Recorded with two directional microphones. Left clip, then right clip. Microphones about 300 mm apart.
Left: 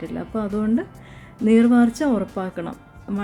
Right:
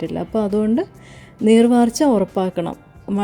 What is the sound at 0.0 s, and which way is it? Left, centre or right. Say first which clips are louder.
Speech: right 6 dB; right.